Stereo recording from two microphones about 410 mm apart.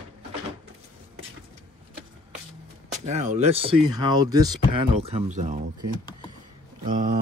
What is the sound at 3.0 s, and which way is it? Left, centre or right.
Speech, centre.